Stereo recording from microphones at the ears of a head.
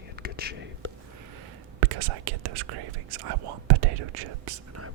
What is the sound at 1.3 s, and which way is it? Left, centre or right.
Speech, right.